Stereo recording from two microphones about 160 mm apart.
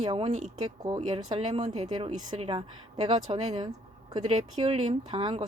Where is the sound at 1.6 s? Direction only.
45° right (ahead or behind).